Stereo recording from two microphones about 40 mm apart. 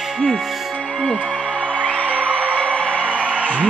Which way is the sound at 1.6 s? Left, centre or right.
Left.